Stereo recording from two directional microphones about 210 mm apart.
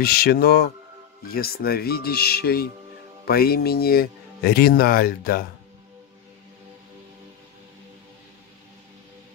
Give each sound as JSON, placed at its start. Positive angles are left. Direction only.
{"t": 0.0, "sound": "speech", "side_deg": 50}